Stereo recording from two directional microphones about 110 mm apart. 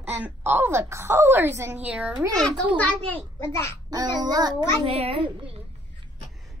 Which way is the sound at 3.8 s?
40° right (ahead or behind).